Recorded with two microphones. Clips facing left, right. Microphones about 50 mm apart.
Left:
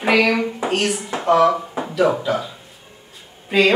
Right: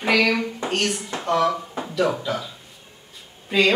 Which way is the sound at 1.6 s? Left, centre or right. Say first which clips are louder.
Left 5 dB; centre.